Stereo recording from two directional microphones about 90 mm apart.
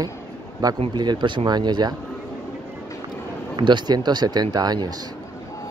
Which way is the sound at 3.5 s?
60° right (ahead or behind).